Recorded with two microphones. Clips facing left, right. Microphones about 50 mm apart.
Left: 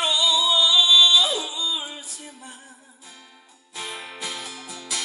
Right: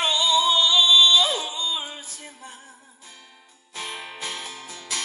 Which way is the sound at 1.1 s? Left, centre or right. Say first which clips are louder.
Even; right.